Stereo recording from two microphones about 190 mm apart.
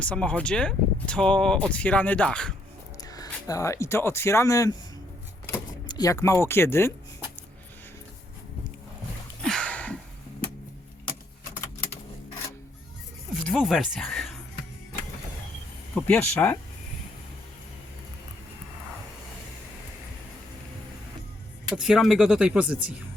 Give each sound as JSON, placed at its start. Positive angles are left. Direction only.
{"t": 0.0, "sound": "speech", "side_deg": 5}
{"t": 3.0, "sound": "speech", "side_deg": 20}
{"t": 9.4, "sound": "a sound", "side_deg": 5}
{"t": 13.3, "sound": "speech", "side_deg": 0}
{"t": 16.0, "sound": "speech", "side_deg": 5}
{"t": 21.8, "sound": "speech", "side_deg": 0}